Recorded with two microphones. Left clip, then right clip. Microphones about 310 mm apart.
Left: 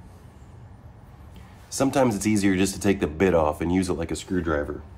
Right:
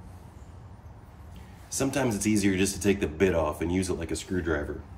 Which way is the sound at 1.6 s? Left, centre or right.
Left.